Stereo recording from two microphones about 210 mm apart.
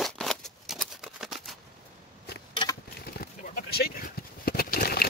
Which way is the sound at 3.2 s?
45° left (ahead or behind).